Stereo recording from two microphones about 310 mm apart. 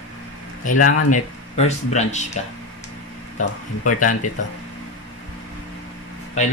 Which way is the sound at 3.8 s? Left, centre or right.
Left.